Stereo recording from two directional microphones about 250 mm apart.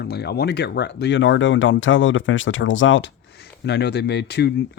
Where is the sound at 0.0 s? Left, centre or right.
Left.